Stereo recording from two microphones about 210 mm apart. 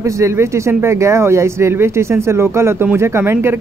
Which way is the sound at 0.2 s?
10° right (ahead or behind).